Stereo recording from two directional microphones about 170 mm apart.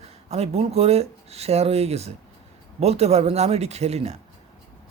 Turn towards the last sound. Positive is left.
turn(degrees=-40)  # may be behind; listen again after turning